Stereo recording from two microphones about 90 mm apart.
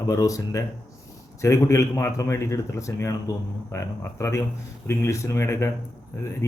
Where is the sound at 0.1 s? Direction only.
40° left (ahead or behind).